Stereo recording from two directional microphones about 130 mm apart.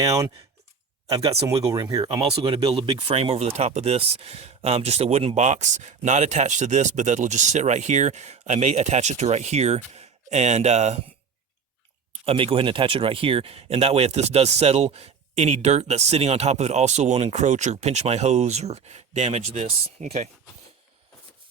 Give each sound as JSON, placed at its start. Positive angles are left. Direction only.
{"t": 0.0, "sound": "speech", "side_deg": -25}
{"t": 1.5, "sound": "speech", "side_deg": -25}
{"t": 2.7, "sound": "speech", "side_deg": -35}
{"t": 12.2, "sound": "speech", "side_deg": -45}